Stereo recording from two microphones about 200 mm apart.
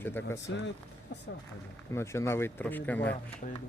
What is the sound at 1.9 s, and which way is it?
Speech, 15° left (ahead or behind).